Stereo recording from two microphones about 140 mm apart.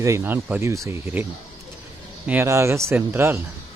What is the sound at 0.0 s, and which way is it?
Speech, 20° right (ahead or behind).